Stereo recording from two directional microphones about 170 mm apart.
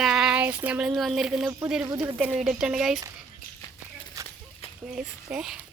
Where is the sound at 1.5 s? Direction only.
15° right (ahead or behind).